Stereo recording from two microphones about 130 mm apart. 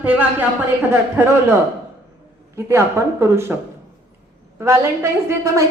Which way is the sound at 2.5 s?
20° right (ahead or behind).